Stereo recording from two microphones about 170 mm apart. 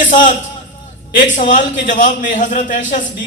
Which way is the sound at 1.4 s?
50° left (ahead or behind).